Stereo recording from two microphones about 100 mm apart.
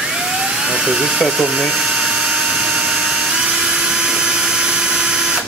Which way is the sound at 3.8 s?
5° right (ahead or behind).